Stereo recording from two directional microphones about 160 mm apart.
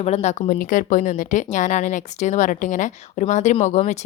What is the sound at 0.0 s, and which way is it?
A woman's voice, 45° left (ahead or behind).